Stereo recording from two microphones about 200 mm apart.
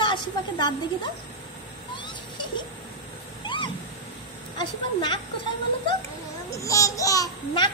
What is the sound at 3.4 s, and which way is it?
Vehicle, 25° left (ahead or behind).